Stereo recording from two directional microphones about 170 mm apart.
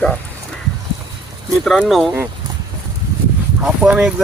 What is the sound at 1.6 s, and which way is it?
Speech, centre (ahead or behind).